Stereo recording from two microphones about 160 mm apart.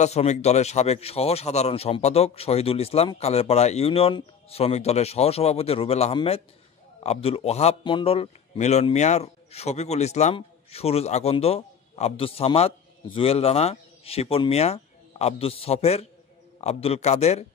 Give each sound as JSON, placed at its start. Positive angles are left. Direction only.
{"t": 0.0, "sound": "a man's voice", "side_deg": 45}